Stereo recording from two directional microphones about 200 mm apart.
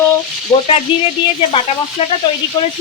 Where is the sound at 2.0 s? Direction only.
30° left (ahead or behind).